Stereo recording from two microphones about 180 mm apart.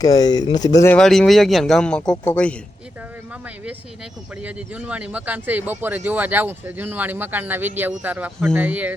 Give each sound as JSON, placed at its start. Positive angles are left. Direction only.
{"t": 0.0, "sound": "speech", "side_deg": 20}
{"t": 0.9, "sound": "a man's voice", "side_deg": 5}
{"t": 4.4, "sound": "speech", "side_deg": -5}